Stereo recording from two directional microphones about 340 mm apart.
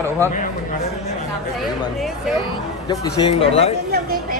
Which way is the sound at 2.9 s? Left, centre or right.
Centre.